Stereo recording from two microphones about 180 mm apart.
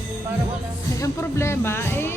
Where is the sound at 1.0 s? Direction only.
15° left (ahead or behind).